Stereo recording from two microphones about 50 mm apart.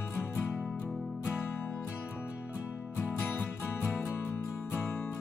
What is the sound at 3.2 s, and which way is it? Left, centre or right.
Music, left.